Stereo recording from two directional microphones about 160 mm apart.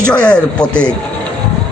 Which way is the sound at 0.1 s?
5° left (ahead or behind).